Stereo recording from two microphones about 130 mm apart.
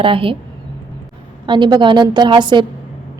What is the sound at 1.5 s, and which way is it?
Speech, 35° right (ahead or behind).